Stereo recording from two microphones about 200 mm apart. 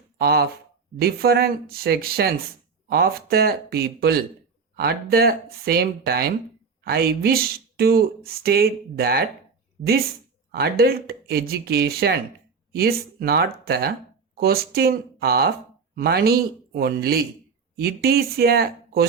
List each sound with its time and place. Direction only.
0.2 s speech: 50° right (ahead or behind)
10.5 s speech: 50° right (ahead or behind)